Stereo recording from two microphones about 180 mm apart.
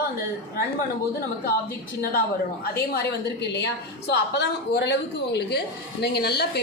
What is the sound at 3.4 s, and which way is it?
A woman's voice, 70° left (ahead or behind).